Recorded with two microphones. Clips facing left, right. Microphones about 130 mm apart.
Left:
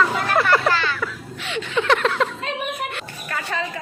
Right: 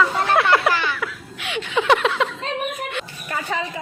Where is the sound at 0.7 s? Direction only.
15° right (ahead or behind).